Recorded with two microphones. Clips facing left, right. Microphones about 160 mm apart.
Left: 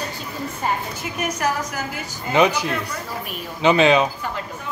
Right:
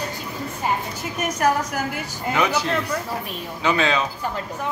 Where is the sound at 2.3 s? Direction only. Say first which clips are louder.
Left 5 dB; 20° left (ahead or behind).